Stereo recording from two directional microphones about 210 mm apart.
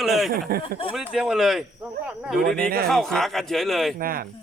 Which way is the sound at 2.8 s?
Centre (ahead or behind).